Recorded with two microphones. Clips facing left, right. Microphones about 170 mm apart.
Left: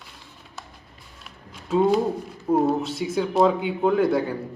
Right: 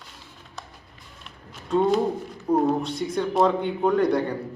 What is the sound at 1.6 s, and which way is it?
A man's voice, 5° left (ahead or behind).